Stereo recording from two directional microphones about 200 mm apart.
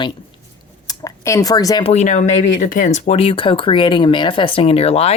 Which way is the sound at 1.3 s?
20° left (ahead or behind).